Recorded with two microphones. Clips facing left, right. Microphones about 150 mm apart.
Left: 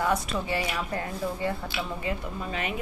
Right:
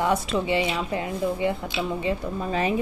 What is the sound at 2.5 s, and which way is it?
Speech, 35° right (ahead or behind).